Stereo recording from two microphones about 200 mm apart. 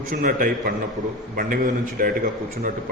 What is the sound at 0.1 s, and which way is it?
A man's voice, 40° right (ahead or behind).